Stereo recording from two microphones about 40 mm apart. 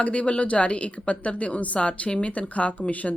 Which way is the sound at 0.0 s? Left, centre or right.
Left.